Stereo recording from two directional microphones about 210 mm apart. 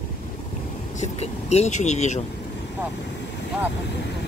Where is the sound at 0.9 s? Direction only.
30° left (ahead or behind).